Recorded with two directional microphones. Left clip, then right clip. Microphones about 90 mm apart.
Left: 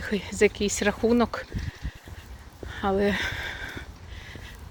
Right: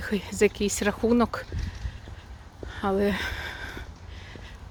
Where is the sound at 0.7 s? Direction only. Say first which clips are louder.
Left 1 dB; 25° right (ahead or behind).